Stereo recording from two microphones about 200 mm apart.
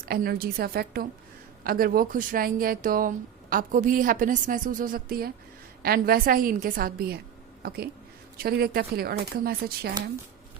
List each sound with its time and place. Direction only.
0.0 s speech: 50° right (ahead or behind)
8.4 s speech: 50° right (ahead or behind)